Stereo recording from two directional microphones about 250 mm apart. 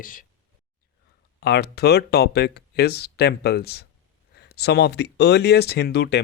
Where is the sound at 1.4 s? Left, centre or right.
Left.